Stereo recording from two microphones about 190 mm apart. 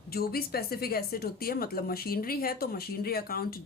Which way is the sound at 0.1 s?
55° left (ahead or behind).